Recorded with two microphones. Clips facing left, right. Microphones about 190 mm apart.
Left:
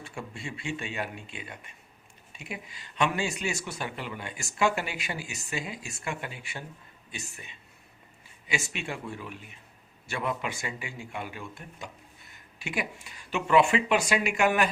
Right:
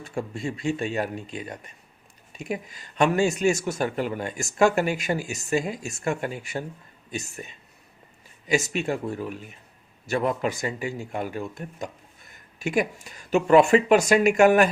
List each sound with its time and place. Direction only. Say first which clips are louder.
0.0 s a man's voice: right 9 dB; 40° right (ahead or behind)